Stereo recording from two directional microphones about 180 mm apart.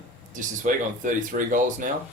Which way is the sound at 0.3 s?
45° right (ahead or behind).